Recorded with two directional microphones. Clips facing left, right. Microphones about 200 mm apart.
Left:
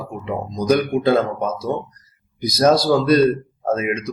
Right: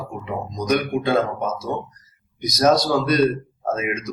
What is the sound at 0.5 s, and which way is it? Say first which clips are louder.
Speech: left 4 dB; 30° left (ahead or behind).